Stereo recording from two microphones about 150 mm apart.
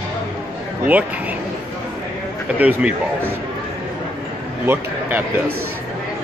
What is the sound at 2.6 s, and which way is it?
Speech, 10° right (ahead or behind).